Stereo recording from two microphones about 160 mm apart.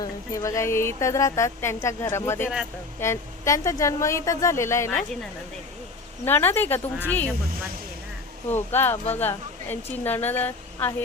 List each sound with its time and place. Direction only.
0.0 s a woman's voice: 20° left (ahead or behind)
6.2 s a woman's voice: 15° left (ahead or behind)
8.7 s a woman's voice: 15° left (ahead or behind)